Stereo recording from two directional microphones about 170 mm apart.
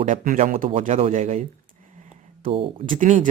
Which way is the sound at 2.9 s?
50° right (ahead or behind).